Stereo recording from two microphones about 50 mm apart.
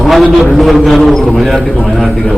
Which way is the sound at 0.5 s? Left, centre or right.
Centre.